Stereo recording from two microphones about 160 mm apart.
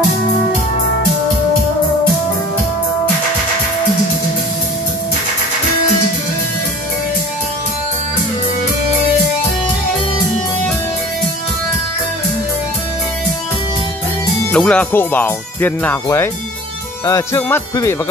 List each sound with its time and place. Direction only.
14.5 s speech: 5° left (ahead or behind)